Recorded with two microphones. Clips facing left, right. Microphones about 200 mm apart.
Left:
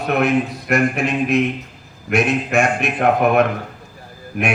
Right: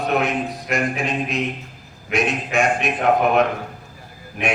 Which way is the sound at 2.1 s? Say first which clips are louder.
Left 4 dB; 50° left (ahead or behind).